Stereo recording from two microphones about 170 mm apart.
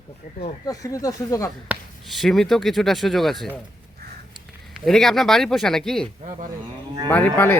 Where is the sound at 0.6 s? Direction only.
20° left (ahead or behind).